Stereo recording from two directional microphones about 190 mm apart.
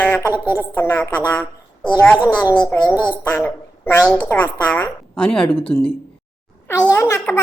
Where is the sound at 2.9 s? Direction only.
10° right (ahead or behind).